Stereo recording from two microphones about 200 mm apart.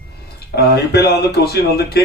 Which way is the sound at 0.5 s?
55° left (ahead or behind).